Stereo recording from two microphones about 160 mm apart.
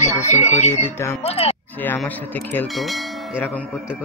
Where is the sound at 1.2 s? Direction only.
40° left (ahead or behind).